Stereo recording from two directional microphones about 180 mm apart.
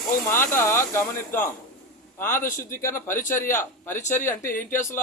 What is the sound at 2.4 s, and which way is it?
Speech, 50° left (ahead or behind).